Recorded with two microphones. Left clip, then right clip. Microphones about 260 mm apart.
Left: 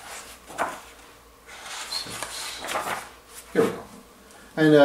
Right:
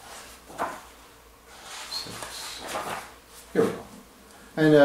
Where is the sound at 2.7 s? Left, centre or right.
Centre.